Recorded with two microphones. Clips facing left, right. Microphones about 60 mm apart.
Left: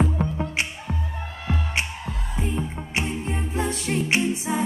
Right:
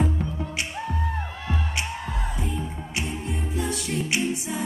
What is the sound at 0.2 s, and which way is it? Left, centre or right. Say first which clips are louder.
Music: left 4 dB; left.